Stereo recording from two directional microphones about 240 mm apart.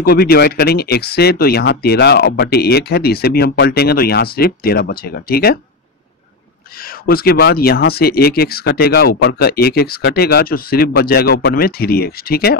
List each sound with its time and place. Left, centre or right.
0.0 s speech: left
6.8 s speech: left